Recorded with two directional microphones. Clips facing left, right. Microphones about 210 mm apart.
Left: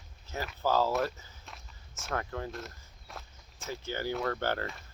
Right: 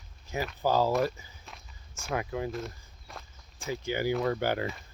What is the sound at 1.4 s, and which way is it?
Walk, centre (ahead or behind).